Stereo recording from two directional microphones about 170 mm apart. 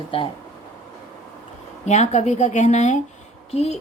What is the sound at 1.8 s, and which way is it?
A woman's voice, 40° left (ahead or behind).